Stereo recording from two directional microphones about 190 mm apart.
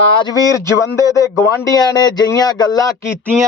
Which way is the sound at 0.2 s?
20° left (ahead or behind).